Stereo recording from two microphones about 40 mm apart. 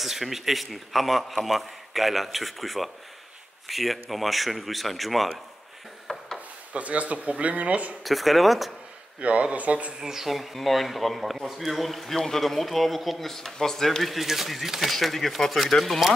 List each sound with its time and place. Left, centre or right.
0.0 s a man's voice: centre
6.1 s a sound: centre
6.7 s speech: right
8.0 s a man's voice: centre
9.2 s speech: right
9.9 s a man's voice: centre